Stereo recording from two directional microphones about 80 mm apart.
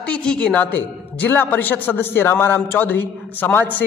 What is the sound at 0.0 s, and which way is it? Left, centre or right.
A woman's voice, centre.